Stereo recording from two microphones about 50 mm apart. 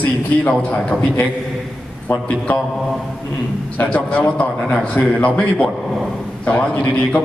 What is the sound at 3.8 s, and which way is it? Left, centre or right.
A man's voice, left.